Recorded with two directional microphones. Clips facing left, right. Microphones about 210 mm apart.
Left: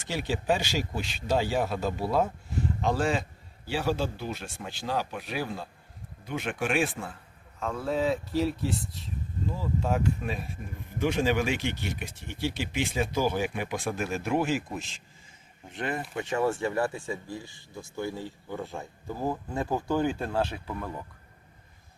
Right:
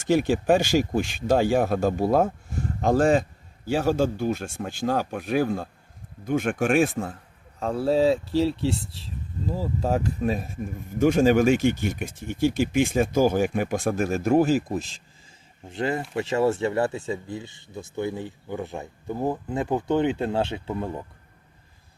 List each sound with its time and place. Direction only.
0.0 s speech: 50° right (ahead or behind); by 21.0 s 25° right (ahead or behind)